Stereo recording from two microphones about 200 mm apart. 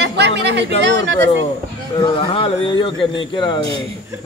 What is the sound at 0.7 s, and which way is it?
Speech, 65° right (ahead or behind).